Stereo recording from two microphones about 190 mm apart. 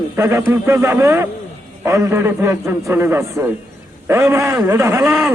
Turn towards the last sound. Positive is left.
turn(degrees=-10)  # may be behind; listen again after turning